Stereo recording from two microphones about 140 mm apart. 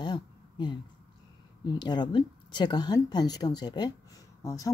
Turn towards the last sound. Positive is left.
turn(degrees=25)  # may be behind; listen again after turning